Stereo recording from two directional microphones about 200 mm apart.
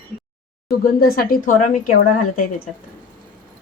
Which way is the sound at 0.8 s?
45° left (ahead or behind).